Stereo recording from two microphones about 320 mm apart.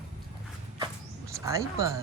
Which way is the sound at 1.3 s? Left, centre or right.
Centre.